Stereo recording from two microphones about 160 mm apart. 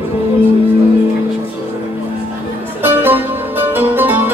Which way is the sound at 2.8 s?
10° right (ahead or behind).